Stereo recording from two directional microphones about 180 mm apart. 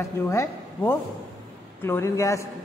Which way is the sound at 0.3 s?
15° left (ahead or behind).